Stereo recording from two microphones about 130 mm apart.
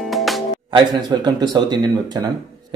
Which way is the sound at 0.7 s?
35° right (ahead or behind).